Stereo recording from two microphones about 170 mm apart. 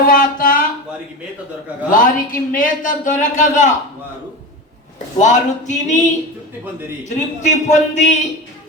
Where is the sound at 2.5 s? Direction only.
50° left (ahead or behind).